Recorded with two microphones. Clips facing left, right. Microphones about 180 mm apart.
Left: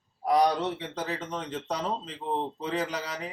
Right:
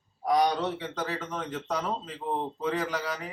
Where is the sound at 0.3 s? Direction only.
30° left (ahead or behind).